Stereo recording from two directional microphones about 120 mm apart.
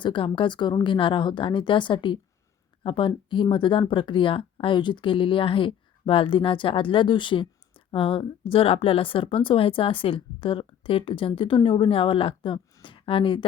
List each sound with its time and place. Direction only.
0.0 s speech: 45° left (ahead or behind)